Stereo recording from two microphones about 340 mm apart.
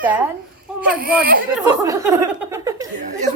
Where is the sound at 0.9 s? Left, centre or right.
Right.